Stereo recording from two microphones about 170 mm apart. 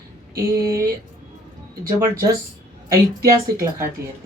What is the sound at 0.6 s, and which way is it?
Speech, 20° right (ahead or behind).